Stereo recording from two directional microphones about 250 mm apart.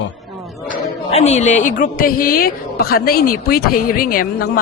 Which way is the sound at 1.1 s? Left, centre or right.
Left.